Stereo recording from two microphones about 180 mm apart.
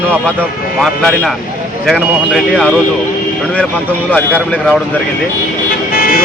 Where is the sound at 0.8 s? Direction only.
Centre (ahead or behind).